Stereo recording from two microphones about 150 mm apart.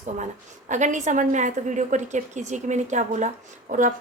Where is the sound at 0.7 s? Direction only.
55° right (ahead or behind).